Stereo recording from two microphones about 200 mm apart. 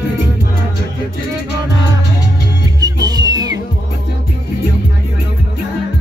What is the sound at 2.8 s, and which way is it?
Music, 20° right (ahead or behind).